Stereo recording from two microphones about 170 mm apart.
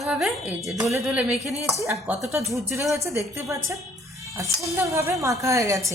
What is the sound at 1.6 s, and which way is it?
A woman's voice, 15° right (ahead or behind).